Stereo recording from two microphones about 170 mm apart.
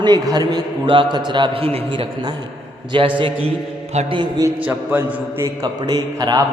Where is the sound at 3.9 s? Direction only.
40° right (ahead or behind).